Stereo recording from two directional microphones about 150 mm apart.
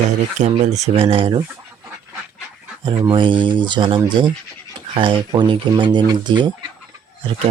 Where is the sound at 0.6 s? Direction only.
50° right (ahead or behind).